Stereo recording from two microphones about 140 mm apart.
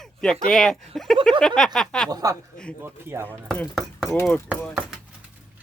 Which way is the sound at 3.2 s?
10° left (ahead or behind).